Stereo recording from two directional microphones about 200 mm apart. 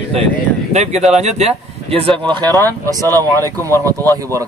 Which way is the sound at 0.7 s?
35° right (ahead or behind).